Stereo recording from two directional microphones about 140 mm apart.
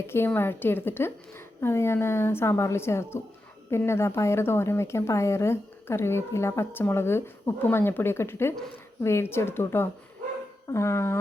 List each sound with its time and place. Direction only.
0.1 s a woman's voice: 15° left (ahead or behind)